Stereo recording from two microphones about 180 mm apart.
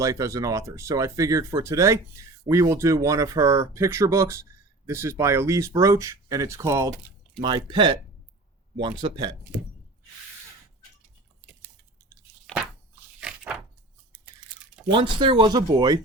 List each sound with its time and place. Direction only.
0.0 s speech: 15° right (ahead or behind)
7.4 s speech: 25° right (ahead or behind)
13.1 s a sound: 5° right (ahead or behind)
14.8 s speech: 25° right (ahead or behind)